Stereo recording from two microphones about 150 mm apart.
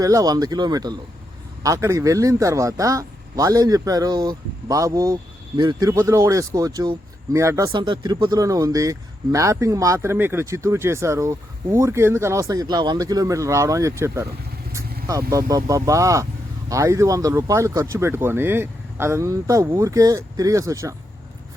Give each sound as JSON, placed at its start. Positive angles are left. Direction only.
{"t": 0.0, "sound": "speech", "side_deg": -25}
{"t": 7.7, "sound": "speech", "side_deg": -30}